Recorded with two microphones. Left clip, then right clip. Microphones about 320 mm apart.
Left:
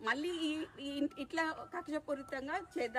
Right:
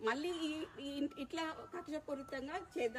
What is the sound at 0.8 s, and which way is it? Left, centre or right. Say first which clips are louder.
Speech: left 3 dB; centre.